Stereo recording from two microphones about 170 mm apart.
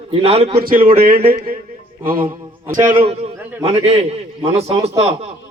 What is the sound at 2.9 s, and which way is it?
A man's voice, 35° right (ahead or behind).